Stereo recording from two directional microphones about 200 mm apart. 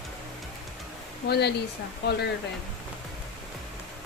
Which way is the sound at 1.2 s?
55° left (ahead or behind).